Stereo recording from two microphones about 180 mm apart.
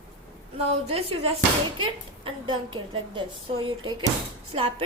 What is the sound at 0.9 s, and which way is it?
Speech, 35° right (ahead or behind).